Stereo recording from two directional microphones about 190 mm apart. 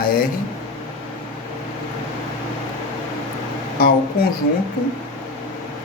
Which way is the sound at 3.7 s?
50° left (ahead or behind).